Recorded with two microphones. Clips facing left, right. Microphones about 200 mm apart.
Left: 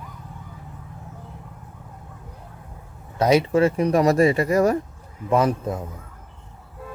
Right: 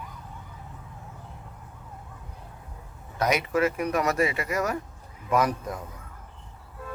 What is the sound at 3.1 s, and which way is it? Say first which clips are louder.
A man's voice: left 7 dB; 30° left (ahead or behind).